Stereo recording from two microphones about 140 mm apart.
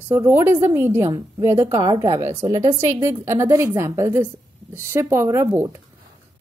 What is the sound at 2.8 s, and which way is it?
A woman's voice, 20° right (ahead or behind).